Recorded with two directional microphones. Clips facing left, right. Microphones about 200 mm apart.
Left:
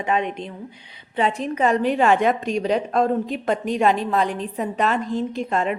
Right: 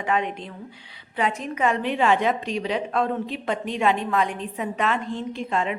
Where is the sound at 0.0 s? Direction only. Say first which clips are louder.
Left 2 dB; 20° left (ahead or behind).